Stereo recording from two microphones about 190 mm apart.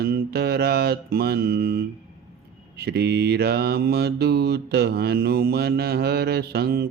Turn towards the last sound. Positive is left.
turn(degrees=-55)  # may be behind; listen again after turning